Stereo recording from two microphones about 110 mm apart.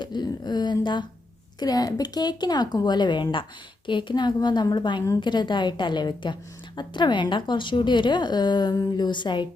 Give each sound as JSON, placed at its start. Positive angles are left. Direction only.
{"t": 0.0, "sound": "a woman's voice", "side_deg": 40}